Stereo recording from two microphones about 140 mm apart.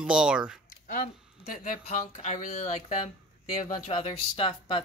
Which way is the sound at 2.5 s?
50° left (ahead or behind).